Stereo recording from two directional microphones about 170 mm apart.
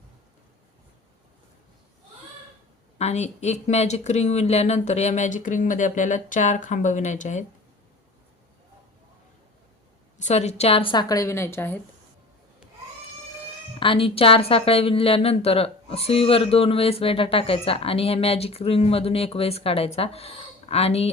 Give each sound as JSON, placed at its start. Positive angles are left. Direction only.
{"t": 3.0, "sound": "speech", "side_deg": 40}
{"t": 10.2, "sound": "a woman's voice", "side_deg": 40}
{"t": 13.7, "sound": "a woman's voice", "side_deg": 30}